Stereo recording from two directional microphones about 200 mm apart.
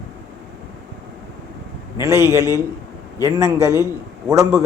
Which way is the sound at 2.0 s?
15° right (ahead or behind).